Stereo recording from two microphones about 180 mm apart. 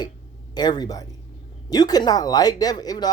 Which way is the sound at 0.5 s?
25° left (ahead or behind).